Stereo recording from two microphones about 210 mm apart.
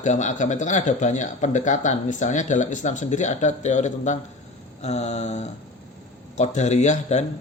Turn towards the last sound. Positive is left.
turn(degrees=35)  # may be behind; listen again after turning